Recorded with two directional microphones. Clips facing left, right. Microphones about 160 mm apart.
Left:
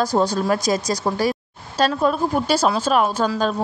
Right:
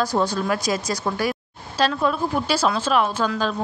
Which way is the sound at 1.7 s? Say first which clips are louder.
Left 2 dB; 45° left (ahead or behind).